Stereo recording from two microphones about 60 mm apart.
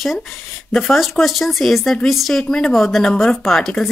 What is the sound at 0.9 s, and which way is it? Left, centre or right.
Speech, centre.